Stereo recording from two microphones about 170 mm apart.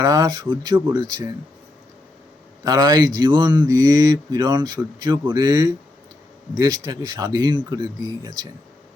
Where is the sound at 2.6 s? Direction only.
25° right (ahead or behind).